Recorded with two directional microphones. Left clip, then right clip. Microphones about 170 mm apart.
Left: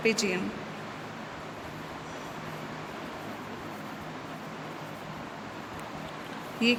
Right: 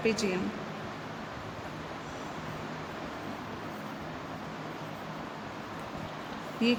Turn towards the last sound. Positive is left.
turn(degrees=5)  # may be behind; listen again after turning